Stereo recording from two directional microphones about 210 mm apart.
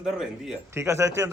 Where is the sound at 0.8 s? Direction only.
15° right (ahead or behind).